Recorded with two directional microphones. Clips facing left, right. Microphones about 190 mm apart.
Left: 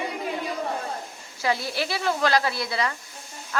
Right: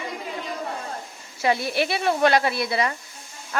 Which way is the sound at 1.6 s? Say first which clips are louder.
Right 3 dB; 20° right (ahead or behind).